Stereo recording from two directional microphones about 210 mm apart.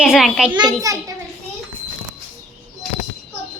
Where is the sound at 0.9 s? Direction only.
15° right (ahead or behind).